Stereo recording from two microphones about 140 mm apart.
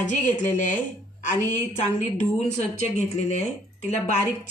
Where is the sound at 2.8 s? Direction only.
55° left (ahead or behind).